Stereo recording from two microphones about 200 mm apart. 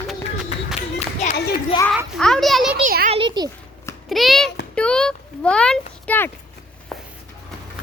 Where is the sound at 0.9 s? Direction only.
35° left (ahead or behind).